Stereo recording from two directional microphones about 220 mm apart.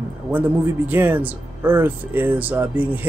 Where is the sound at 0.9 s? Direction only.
10° right (ahead or behind).